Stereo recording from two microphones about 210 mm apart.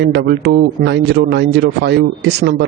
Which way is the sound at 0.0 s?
50° right (ahead or behind).